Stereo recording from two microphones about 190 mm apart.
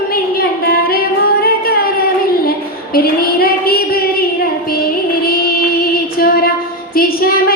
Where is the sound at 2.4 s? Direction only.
50° left (ahead or behind).